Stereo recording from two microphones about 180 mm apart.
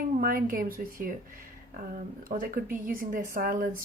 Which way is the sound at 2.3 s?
50° right (ahead or behind).